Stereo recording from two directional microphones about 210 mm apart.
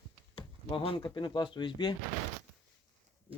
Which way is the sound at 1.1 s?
20° left (ahead or behind).